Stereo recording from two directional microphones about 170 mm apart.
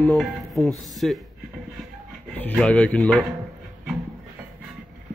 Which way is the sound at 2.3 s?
5° left (ahead or behind).